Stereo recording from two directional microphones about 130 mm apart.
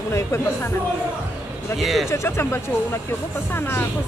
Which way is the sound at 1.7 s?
Centre (ahead or behind).